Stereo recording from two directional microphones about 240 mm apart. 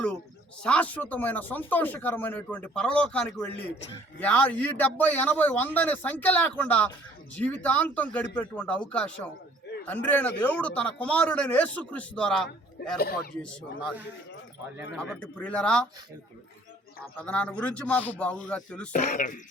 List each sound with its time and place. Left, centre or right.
0.6 s a man's voice: centre
12.8 s speech: left
13.3 s speech: centre
15.2 s speech: centre
17.2 s speech: centre
18.9 s speech: left